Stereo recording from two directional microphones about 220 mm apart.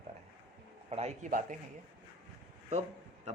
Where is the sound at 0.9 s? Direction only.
30° right (ahead or behind).